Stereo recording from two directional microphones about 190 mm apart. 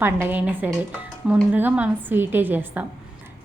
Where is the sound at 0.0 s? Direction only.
10° right (ahead or behind).